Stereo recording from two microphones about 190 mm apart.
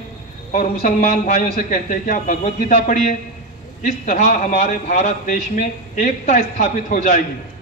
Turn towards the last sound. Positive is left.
turn(degrees=35)  # may be behind; listen again after turning